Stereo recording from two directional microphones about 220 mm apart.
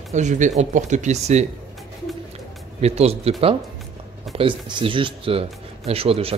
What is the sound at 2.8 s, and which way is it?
Speech, 30° right (ahead or behind).